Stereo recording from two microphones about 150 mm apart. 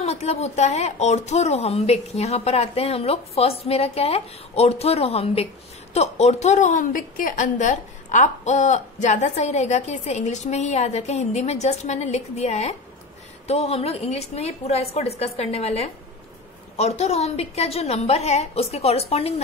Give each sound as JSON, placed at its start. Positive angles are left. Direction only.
{"t": 0.0, "sound": "a woman's voice", "side_deg": 45}